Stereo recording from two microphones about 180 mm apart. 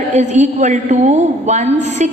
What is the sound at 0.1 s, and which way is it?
A woman's voice, 40° right (ahead or behind).